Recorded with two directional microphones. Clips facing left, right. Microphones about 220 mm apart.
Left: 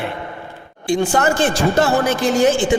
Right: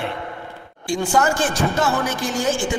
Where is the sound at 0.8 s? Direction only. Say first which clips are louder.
Left 3 dB; 25° left (ahead or behind).